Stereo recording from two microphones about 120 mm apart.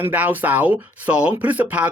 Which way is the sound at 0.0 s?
15° right (ahead or behind).